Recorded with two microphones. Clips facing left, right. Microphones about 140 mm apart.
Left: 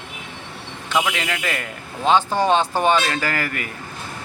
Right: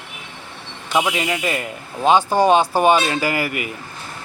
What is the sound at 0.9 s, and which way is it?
Speech, 20° right (ahead or behind).